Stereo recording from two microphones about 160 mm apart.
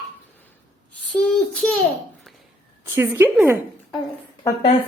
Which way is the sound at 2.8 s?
15° right (ahead or behind).